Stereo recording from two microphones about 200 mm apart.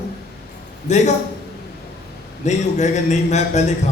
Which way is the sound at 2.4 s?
35° left (ahead or behind).